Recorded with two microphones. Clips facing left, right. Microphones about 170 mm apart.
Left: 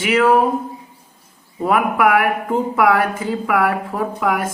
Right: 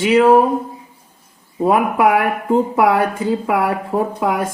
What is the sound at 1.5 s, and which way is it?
A woman's voice, 25° right (ahead or behind).